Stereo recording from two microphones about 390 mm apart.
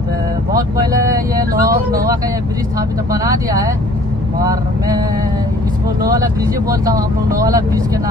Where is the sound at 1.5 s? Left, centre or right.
Right.